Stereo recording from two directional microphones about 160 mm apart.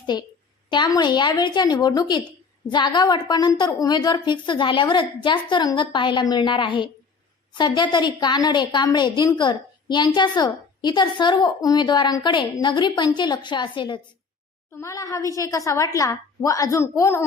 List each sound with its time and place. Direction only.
0.0 s a woman's voice: 25° left (ahead or behind)